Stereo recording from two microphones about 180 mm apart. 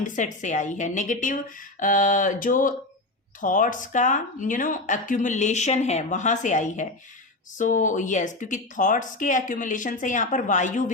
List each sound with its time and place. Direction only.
0.0 s speech: 45° left (ahead or behind)